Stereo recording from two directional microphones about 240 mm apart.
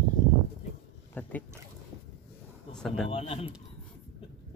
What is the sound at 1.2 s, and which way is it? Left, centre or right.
Boat, centre.